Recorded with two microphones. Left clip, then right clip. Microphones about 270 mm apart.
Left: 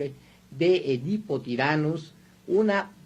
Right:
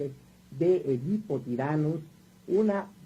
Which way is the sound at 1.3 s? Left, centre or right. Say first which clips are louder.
Left 6 dB; left.